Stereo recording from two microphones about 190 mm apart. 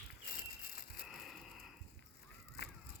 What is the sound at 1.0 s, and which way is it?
Crushing, centre (ahead or behind).